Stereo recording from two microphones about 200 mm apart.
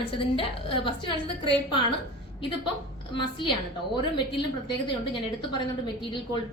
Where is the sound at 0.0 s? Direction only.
25° left (ahead or behind).